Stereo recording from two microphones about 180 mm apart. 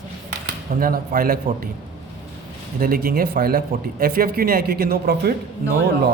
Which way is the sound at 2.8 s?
55° right (ahead or behind).